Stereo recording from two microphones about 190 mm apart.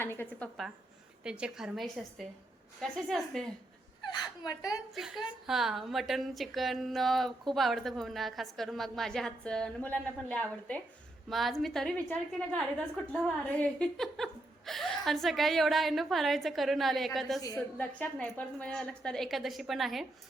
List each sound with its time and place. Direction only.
0.0 s a woman's voice: 10° left (ahead or behind)
1.2 s a woman's voice: 5° right (ahead or behind)
4.0 s a woman's voice: 20° left (ahead or behind)
4.9 s a woman's voice: centre (ahead or behind)
13.1 s a woman's voice: 5° left (ahead or behind)